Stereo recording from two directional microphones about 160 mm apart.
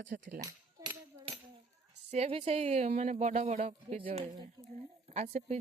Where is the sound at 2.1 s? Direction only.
40° right (ahead or behind).